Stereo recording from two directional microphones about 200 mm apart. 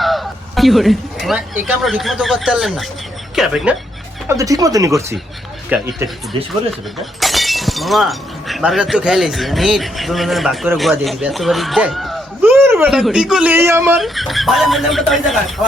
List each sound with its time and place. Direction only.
0.0 s speech: centre (ahead or behind)
4.3 s speech: 15° right (ahead or behind); by 15.6 s centre (ahead or behind)